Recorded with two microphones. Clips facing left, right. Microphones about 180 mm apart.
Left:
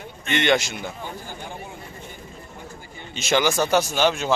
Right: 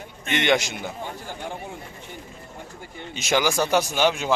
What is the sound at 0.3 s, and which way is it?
Speech, 15° right (ahead or behind).